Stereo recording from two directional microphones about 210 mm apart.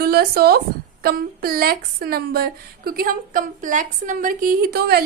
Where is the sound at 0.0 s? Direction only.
50° right (ahead or behind).